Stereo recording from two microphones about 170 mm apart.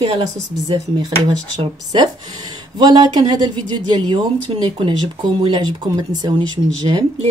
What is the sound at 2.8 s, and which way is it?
Speech, 25° right (ahead or behind).